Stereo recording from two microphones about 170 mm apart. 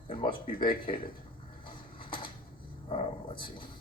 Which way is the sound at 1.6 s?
30° left (ahead or behind).